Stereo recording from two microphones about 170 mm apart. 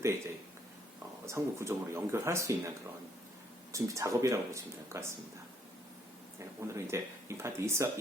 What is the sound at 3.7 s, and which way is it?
Speech, 20° right (ahead or behind).